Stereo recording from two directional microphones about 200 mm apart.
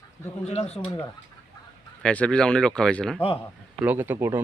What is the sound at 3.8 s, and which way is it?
Speech, 10° right (ahead or behind).